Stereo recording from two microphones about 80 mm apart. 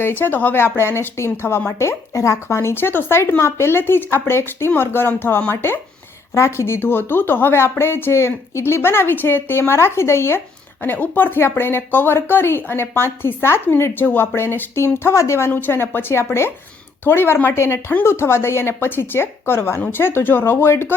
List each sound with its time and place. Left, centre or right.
0.0 s a woman's voice: left